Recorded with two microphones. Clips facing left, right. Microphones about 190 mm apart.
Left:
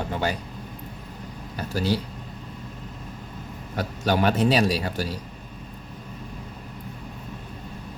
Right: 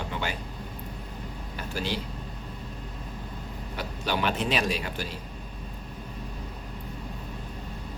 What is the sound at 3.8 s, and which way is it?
Speech, 45° left (ahead or behind).